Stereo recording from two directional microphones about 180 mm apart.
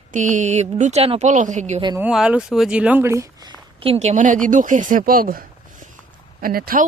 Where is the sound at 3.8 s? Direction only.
35° right (ahead or behind); by 5.4 s 55° right (ahead or behind).